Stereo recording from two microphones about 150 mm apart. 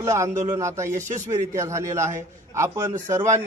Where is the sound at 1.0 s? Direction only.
55° right (ahead or behind).